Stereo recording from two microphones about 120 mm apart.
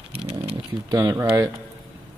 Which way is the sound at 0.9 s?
25° right (ahead or behind).